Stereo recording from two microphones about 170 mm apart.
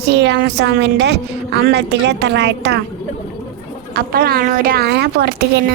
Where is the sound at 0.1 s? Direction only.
85° right.